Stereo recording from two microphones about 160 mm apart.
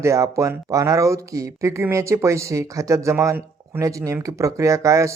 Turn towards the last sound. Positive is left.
turn(degrees=-20)  # may be behind; listen again after turning